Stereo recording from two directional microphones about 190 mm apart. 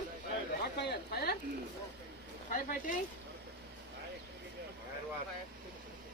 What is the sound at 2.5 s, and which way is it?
Speech, 45° left (ahead or behind).